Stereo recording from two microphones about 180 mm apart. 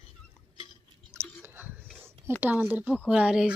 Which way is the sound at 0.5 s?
30° left (ahead or behind).